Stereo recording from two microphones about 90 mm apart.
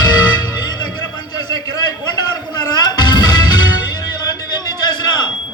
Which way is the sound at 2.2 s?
50° left (ahead or behind).